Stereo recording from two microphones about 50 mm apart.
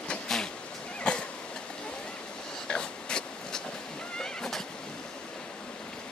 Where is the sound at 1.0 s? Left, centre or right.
Left.